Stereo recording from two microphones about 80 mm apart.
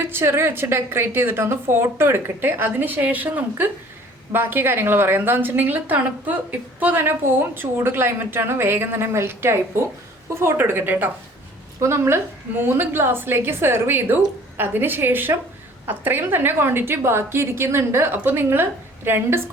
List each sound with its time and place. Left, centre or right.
0.0 s a woman's voice: right
11.8 s a woman's voice: right